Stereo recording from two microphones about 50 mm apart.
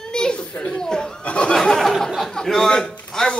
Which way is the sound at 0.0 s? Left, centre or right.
Centre.